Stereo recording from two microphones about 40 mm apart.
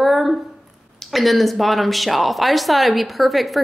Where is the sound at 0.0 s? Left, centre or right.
Centre.